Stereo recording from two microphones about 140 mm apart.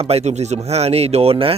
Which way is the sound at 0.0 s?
50° right (ahead or behind).